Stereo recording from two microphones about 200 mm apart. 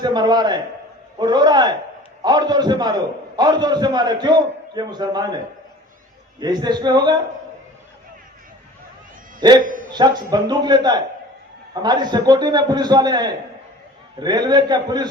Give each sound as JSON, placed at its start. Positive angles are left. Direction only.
{"t": 0.0, "sound": "a man's voice", "side_deg": -20}
{"t": 6.4, "sound": "a man's voice", "side_deg": -20}
{"t": 9.4, "sound": "a man's voice", "side_deg": -20}